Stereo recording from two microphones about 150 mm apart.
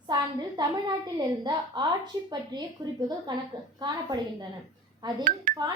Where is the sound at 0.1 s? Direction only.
30° right (ahead or behind).